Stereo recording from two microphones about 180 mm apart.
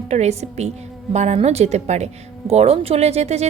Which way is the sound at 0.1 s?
40° right (ahead or behind).